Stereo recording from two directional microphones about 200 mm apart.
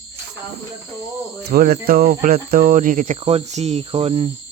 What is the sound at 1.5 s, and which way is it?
Cricket, 50° right (ahead or behind).